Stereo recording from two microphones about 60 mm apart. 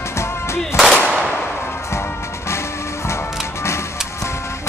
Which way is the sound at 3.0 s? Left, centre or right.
Left.